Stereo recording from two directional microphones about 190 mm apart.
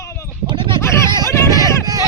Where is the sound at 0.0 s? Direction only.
15° left (ahead or behind).